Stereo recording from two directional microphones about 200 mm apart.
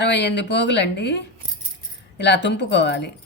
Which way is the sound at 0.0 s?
60° left (ahead or behind).